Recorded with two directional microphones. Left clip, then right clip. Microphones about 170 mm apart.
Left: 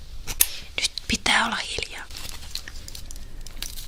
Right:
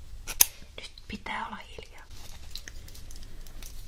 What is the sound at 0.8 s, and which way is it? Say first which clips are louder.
Whispering: left 18 dB; 85° left.